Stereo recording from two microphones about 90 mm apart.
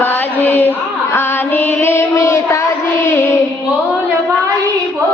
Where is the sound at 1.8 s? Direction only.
30° left (ahead or behind).